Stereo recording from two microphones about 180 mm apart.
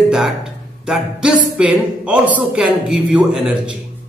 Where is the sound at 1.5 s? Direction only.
5° right (ahead or behind).